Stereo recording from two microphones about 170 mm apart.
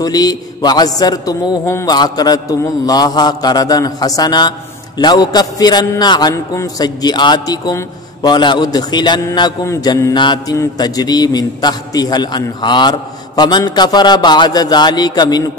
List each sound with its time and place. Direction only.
0.0 s mantra: 20° left (ahead or behind)